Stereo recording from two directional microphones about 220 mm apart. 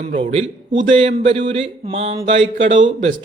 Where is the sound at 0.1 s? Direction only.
25° right (ahead or behind).